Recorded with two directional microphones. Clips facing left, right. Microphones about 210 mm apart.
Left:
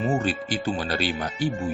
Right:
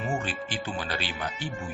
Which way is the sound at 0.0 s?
40° left (ahead or behind).